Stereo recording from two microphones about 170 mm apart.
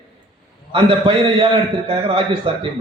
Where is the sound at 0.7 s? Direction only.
35° right (ahead or behind).